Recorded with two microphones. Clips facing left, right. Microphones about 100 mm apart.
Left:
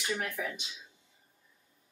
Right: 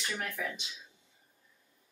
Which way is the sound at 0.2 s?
Centre (ahead or behind).